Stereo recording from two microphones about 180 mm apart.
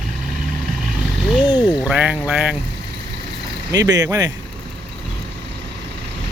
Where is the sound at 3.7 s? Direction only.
20° right (ahead or behind).